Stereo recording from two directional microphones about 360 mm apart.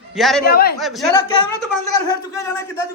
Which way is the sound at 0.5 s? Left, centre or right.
Left.